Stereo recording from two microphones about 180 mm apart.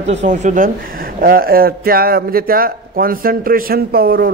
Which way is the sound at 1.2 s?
55° right (ahead or behind).